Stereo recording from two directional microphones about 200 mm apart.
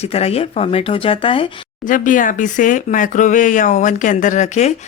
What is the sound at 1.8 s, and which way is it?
Speech, 40° left (ahead or behind).